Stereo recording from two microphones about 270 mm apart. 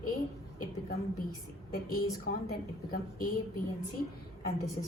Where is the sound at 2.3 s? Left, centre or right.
Left.